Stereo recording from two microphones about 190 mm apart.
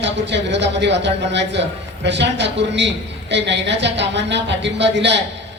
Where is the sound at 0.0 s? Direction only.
65° right (ahead or behind).